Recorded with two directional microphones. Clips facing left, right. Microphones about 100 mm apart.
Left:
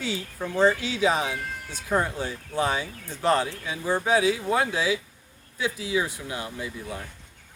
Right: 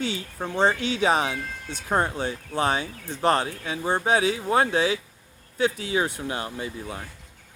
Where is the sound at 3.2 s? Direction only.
60° right (ahead or behind).